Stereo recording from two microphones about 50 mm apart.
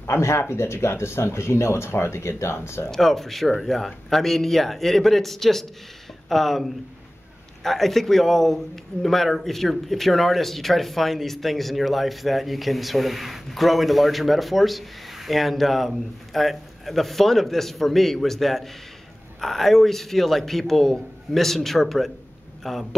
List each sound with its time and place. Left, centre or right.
0.0 s speech: left
2.9 s speech: centre